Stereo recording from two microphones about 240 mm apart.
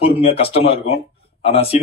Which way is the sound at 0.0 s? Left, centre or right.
Left.